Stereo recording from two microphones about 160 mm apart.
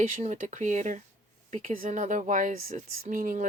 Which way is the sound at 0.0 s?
50° right (ahead or behind).